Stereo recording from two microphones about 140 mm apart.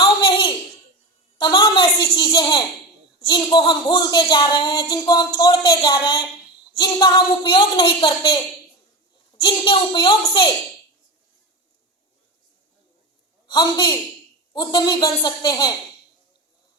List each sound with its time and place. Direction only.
0.0 s a sound: 40° left (ahead or behind)
3.2 s speech: 30° left (ahead or behind)
9.4 s speech: 35° left (ahead or behind)
13.5 s speech: 35° left (ahead or behind)